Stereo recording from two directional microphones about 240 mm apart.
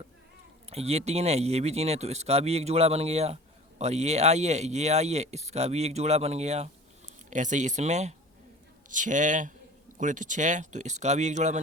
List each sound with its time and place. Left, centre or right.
0.7 s speech: right